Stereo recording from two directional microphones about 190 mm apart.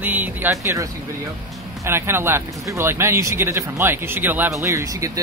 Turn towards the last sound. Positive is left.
turn(degrees=-15)  # may be behind; listen again after turning